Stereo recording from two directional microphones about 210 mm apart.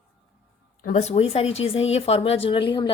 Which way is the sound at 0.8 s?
35° left (ahead or behind).